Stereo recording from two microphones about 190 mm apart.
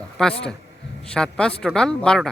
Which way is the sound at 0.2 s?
5° left (ahead or behind).